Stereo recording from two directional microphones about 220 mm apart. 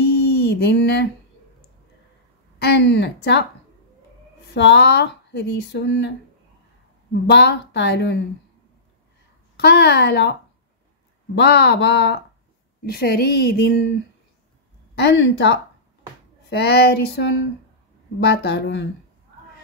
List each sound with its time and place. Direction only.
0.4 s speech: 50° left (ahead or behind)
2.6 s speech: 50° left (ahead or behind)
4.5 s speech: 50° left (ahead or behind)
9.6 s speech: 50° left (ahead or behind)
11.3 s speech: 50° left (ahead or behind)
15.0 s speech: 55° left (ahead or behind)